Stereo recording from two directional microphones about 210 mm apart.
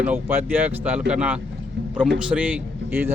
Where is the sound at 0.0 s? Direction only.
10° right (ahead or behind).